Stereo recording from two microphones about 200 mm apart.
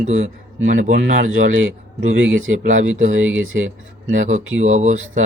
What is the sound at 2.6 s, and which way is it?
Speech, 40° right (ahead or behind).